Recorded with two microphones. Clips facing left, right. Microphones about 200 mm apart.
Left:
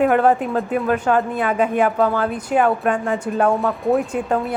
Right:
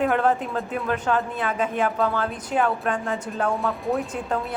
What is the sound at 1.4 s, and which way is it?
Speech, 60° left (ahead or behind).